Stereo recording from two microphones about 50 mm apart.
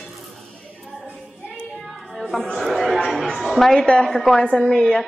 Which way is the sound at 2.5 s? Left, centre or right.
Centre.